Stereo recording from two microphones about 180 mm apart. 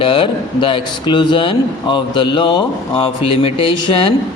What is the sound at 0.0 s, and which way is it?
A man's voice, 25° left (ahead or behind).